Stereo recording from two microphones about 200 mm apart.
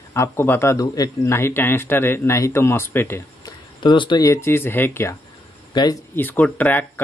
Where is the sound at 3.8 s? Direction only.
25° left (ahead or behind).